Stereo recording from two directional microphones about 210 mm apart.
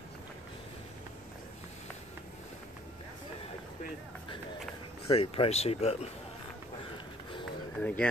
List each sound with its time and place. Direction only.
5.0 s speech: 30° left (ahead or behind)
7.8 s speech: 5° left (ahead or behind)